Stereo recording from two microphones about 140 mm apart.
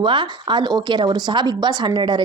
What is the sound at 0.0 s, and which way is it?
Speech, 35° right (ahead or behind).